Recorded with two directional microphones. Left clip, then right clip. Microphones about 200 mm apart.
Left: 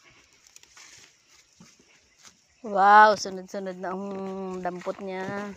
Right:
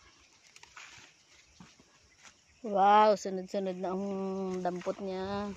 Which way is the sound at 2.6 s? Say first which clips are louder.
Left 7 dB; 10° left (ahead or behind).